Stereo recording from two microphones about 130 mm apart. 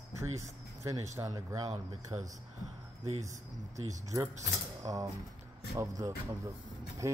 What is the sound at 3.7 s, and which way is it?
Speech, 25° right (ahead or behind).